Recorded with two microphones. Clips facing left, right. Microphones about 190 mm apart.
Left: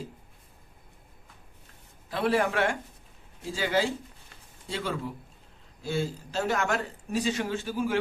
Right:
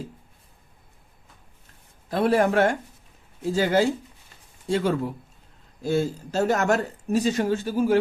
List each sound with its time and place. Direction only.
2.0 s speech: 45° right (ahead or behind)